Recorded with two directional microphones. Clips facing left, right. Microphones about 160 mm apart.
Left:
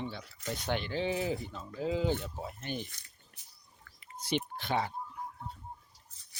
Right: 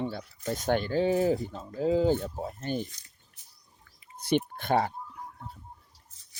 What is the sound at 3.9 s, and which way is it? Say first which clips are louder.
Bird: left 3 dB; 65° left (ahead or behind).